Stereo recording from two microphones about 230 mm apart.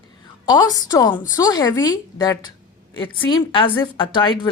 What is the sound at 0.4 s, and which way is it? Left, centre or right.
A woman's voice, centre.